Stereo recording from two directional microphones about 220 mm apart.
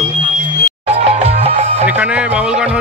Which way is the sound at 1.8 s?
5° right (ahead or behind).